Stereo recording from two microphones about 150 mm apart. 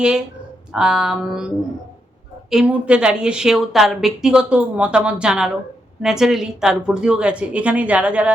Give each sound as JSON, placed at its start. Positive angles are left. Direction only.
{"t": 0.7, "sound": "a woman's voice", "side_deg": -5}